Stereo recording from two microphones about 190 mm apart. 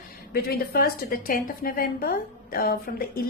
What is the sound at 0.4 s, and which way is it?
A woman's voice, 50° left (ahead or behind).